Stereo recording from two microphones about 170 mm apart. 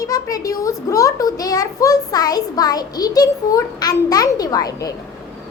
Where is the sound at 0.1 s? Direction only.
20° left (ahead or behind).